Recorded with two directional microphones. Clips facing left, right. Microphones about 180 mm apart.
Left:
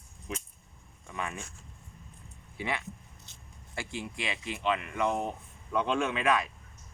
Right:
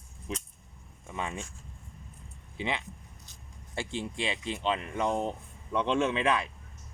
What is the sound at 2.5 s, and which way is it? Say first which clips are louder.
Speech: right 1 dB; 20° right (ahead or behind).